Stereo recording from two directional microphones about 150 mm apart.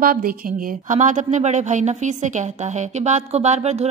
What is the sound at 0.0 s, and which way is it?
Speech, 70° right (ahead or behind).